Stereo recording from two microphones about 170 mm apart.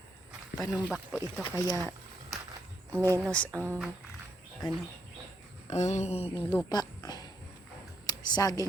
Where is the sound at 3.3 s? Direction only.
5° left (ahead or behind).